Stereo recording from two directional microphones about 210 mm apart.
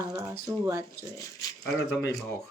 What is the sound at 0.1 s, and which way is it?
Speech, 15° right (ahead or behind).